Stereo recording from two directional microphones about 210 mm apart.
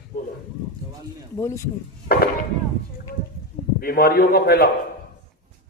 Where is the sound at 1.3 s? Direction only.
15° left (ahead or behind).